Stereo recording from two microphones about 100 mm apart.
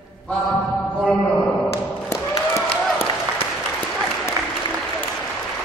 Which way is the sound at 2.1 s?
30° left (ahead or behind).